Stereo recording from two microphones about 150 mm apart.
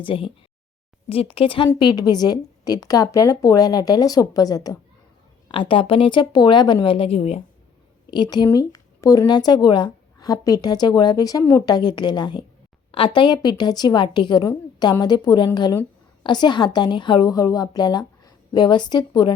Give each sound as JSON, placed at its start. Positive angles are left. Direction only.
{"t": 0.0, "sound": "a woman's voice", "side_deg": 35}
{"t": 5.5, "sound": "speech", "side_deg": 35}
{"t": 8.1, "sound": "a woman's voice", "side_deg": 30}